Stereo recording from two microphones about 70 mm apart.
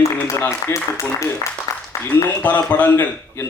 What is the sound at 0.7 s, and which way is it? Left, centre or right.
Speech, left.